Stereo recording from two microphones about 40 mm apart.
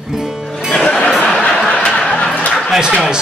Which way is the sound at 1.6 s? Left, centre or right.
Left.